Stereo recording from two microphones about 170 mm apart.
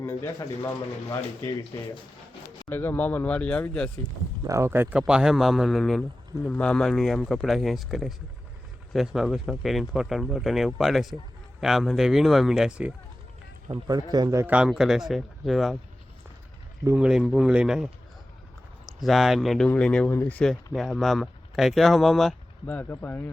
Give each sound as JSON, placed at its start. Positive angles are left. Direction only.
{"t": 0.0, "sound": "speech", "side_deg": 15}
{"t": 1.7, "sound": "speech", "side_deg": 15}
{"t": 4.4, "sound": "a man's voice", "side_deg": -15}
{"t": 13.8, "sound": "speech", "side_deg": -25}
{"t": 14.5, "sound": "a man's voice", "side_deg": -5}
{"t": 16.8, "sound": "a man's voice", "side_deg": -5}
{"t": 18.9, "sound": "a man's voice", "side_deg": 0}